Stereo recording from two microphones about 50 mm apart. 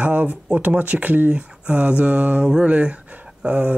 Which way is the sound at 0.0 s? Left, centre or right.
Right.